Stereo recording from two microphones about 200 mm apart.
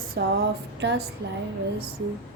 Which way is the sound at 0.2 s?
55° right (ahead or behind).